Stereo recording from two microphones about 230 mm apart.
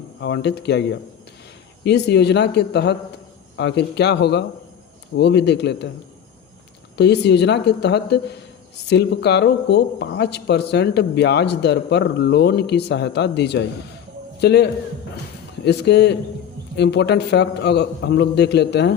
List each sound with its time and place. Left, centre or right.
0.2 s a man's voice: left
6.9 s a man's voice: left